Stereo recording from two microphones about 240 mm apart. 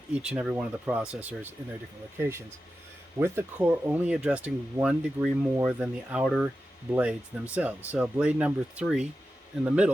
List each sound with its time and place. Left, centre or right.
0.1 s speech: centre